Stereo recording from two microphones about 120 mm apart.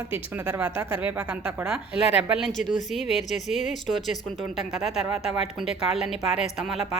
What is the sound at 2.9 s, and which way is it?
A woman's voice, centre (ahead or behind).